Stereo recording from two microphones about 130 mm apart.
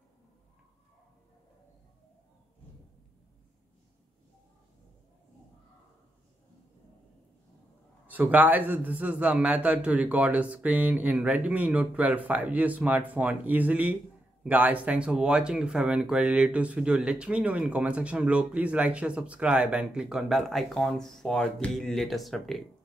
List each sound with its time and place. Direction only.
8.1 s speech: 15° right (ahead or behind)